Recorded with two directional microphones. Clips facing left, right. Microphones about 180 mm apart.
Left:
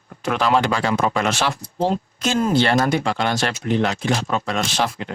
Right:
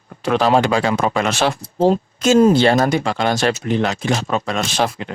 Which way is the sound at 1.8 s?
45° right (ahead or behind).